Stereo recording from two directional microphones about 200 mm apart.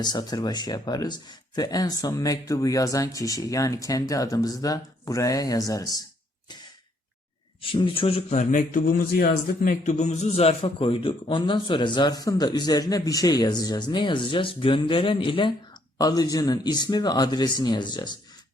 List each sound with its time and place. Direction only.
0.0 s speech: 20° left (ahead or behind)
7.6 s a man's voice: 25° left (ahead or behind)